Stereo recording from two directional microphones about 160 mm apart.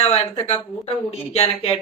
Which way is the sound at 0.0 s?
40° left (ahead or behind).